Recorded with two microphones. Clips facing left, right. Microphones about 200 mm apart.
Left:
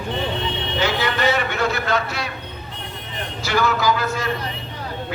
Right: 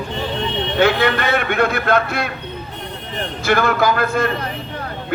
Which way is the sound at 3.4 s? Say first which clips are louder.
Right 4 dB; 55° right (ahead or behind).